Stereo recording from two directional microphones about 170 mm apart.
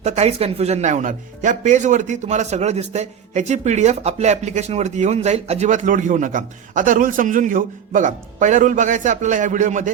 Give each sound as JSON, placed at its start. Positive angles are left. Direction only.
{"t": 0.0, "sound": "speech", "side_deg": -40}